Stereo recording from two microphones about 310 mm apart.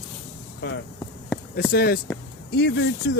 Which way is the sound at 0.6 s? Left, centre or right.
Left.